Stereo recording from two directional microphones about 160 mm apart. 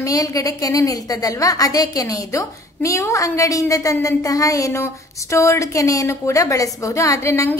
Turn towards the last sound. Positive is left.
turn(degrees=15)  # may be behind; listen again after turning